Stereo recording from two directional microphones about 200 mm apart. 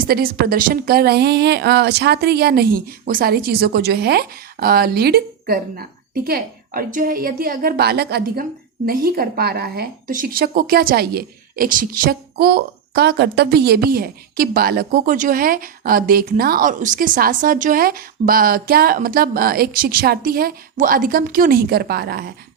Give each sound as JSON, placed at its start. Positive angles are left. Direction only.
{"t": 0.1, "sound": "a woman's voice", "side_deg": -50}